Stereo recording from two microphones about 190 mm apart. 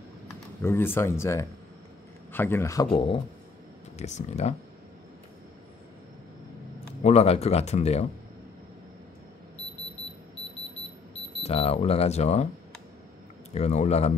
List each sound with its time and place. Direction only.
0.6 s speech: 10° left (ahead or behind)
2.9 s speech: 30° left (ahead or behind)
7.0 s speech: 35° left (ahead or behind)
11.4 s speech: 30° left (ahead or behind)
13.6 s speech: 35° left (ahead or behind)